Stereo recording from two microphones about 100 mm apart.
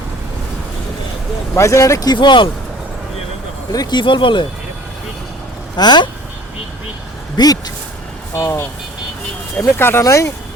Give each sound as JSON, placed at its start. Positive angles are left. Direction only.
{"t": 1.5, "sound": "speech", "side_deg": 30}
{"t": 2.1, "sound": "speech", "side_deg": 55}
{"t": 3.7, "sound": "speech", "side_deg": 45}
{"t": 5.7, "sound": "speech", "side_deg": 45}
{"t": 7.3, "sound": "speech", "side_deg": 40}
{"t": 8.3, "sound": "speech", "side_deg": 30}
{"t": 9.6, "sound": "speech", "side_deg": 25}